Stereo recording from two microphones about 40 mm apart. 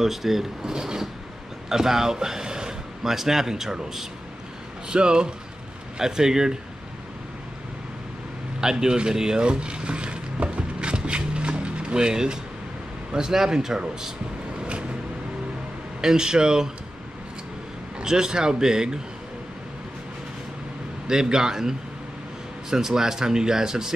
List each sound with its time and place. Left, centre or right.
0.0 s speech: centre
4.8 s speech: right
8.5 s mechanisms: centre
13.1 s speech: centre
14.6 s vehicle: right
16.0 s speech: centre
18.0 s speech: centre
21.1 s speech: centre